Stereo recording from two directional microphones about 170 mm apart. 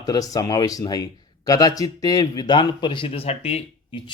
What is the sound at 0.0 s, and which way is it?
A man's voice, 20° left (ahead or behind).